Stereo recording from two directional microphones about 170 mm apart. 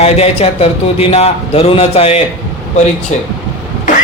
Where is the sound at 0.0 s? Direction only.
35° left (ahead or behind).